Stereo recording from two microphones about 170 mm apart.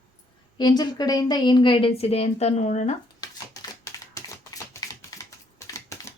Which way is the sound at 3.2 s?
20° left (ahead or behind).